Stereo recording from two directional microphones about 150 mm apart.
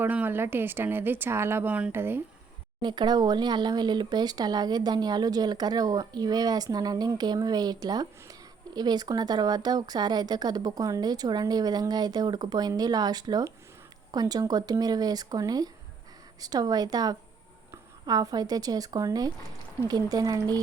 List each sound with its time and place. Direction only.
0.0 s a woman's voice: 10° right (ahead or behind)
2.8 s a woman's voice: 30° right (ahead or behind)